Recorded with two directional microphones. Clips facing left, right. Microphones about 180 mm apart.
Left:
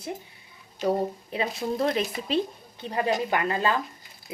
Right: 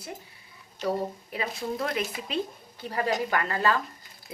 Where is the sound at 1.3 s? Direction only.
30° left (ahead or behind).